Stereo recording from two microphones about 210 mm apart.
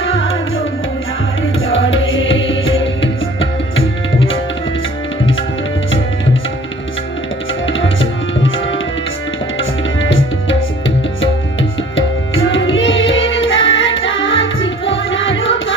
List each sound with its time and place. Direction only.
0.0 s music: 70° left (ahead or behind)
1.7 s music: 65° left (ahead or behind)
7.6 s tabla: 65° left (ahead or behind)
9.6 s music: 70° left (ahead or behind)
11.9 s music: 65° left (ahead or behind)